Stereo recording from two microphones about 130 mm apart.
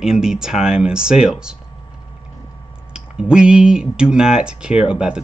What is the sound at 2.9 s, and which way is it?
Speech, 5° right (ahead or behind).